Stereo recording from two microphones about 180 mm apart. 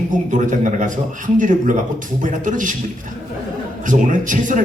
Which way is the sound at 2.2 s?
45° right (ahead or behind).